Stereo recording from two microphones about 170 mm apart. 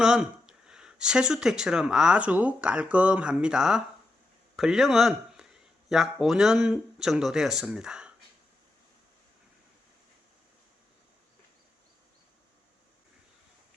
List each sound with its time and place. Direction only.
0.0 s a man's voice: 5° right (ahead or behind)